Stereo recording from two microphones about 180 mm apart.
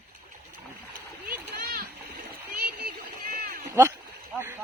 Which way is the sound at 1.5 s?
60° right (ahead or behind).